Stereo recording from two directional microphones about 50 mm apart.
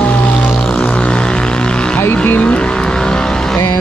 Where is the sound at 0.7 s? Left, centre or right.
Centre.